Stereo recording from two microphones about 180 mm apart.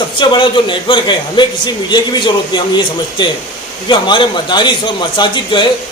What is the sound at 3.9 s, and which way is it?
A man's voice, 25° left (ahead or behind).